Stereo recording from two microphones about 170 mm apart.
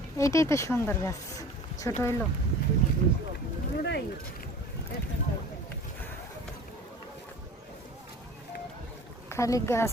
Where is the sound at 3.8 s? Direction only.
80° left.